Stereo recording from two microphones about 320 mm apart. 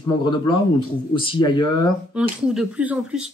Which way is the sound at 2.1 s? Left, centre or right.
Centre.